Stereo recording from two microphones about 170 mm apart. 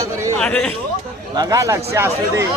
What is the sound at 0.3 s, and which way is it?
Speech, 5° left (ahead or behind).